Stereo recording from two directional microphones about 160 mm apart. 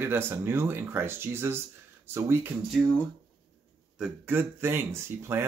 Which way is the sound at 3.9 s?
5° right (ahead or behind).